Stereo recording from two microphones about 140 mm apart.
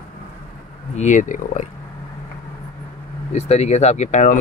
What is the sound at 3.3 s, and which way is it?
Speech, 50° left (ahead or behind).